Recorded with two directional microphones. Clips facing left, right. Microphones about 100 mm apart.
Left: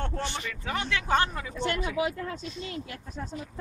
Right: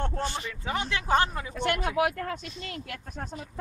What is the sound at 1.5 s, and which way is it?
Speech, 60° right (ahead or behind).